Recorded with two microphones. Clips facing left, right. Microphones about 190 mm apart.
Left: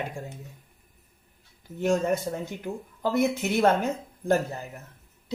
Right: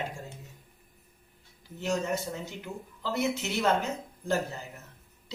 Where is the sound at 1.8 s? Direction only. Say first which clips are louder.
Left 6 dB; 55° left (ahead or behind).